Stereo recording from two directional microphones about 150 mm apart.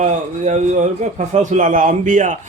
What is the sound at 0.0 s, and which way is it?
A man's voice, 50° right (ahead or behind).